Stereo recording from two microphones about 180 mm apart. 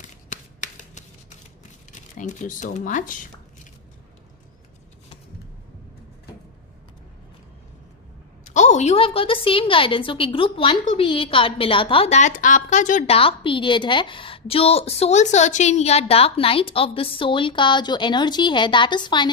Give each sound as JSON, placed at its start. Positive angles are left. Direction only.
{"t": 0.3, "sound": "shuffling cards", "side_deg": 40}
{"t": 1.9, "sound": "speech", "side_deg": 45}
{"t": 8.5, "sound": "a woman's voice", "side_deg": 40}